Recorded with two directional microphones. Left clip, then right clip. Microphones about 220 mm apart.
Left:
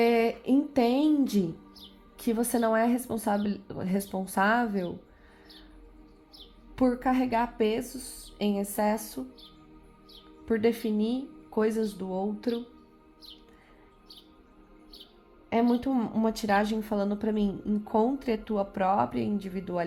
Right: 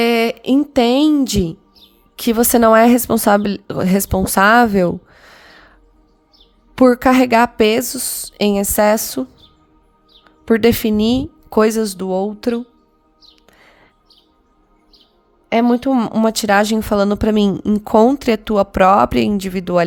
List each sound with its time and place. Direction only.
0.0 s speech: 40° right (ahead or behind)
6.7 s speech: 55° right (ahead or behind)
10.4 s speech: 55° right (ahead or behind)
15.6 s speech: 55° right (ahead or behind)